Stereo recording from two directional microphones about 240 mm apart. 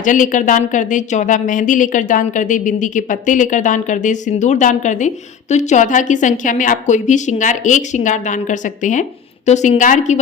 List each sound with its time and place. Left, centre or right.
0.0 s speech: left